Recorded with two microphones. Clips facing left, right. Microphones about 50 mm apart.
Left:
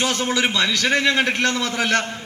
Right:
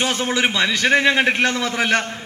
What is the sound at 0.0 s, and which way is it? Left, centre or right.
A man's voice, centre.